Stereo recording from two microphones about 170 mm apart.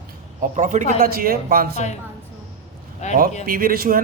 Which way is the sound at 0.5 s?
45° right (ahead or behind).